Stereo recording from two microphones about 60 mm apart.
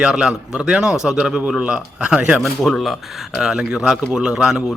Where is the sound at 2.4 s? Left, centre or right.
Centre.